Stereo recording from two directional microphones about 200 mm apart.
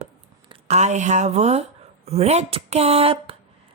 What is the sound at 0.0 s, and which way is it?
A woman's voice, 30° right (ahead or behind).